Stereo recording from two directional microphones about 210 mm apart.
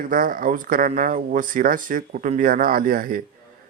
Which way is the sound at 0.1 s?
40° right (ahead or behind).